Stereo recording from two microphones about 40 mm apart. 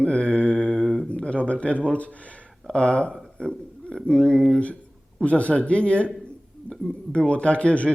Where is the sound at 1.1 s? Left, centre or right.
Left.